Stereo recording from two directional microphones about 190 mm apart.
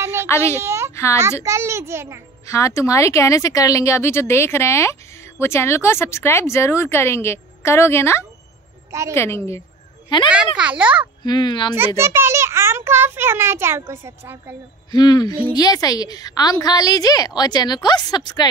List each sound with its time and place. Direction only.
0.0 s a sound: 15° right (ahead or behind)
0.3 s speech: 15° left (ahead or behind)
0.6 s a sound: 15° right (ahead or behind)
1.4 s a child's voice: 15° right (ahead or behind)
2.4 s speech: 15° left (ahead or behind)
10.0 s a child's voice: 25° left (ahead or behind)
10.3 s a child's voice: 5° right (ahead or behind)
11.2 s a woman's voice: 25° left (ahead or behind)
12.0 s a child's voice: 15° right (ahead or behind)
14.9 s a woman's voice: 20° left (ahead or behind)